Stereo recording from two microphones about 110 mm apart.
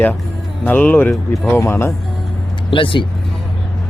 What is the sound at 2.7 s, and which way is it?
Speech, 50° left (ahead or behind).